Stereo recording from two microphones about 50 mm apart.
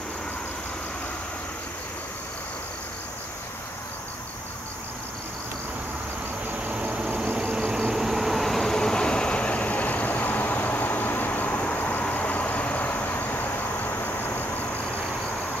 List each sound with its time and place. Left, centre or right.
6.5 s vehicle: right
7.9 s train: centre; by 12.0 s left
12.1 s vehicle: left